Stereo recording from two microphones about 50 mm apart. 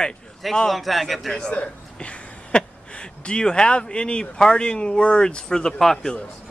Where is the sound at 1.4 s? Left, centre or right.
Centre.